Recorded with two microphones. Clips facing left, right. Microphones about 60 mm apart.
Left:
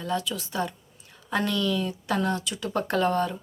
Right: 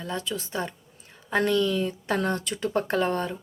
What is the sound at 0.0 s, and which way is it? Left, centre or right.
A woman's voice, right.